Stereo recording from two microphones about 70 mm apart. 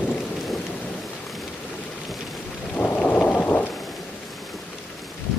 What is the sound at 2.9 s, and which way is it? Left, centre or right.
Thunder, left.